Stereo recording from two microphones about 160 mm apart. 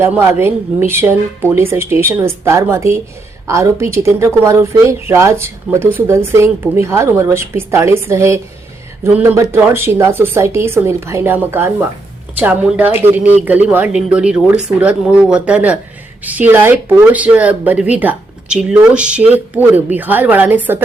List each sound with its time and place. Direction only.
0.0 s speech: 15° right (ahead or behind)